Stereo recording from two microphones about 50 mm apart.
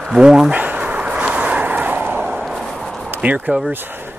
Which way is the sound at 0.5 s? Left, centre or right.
Right.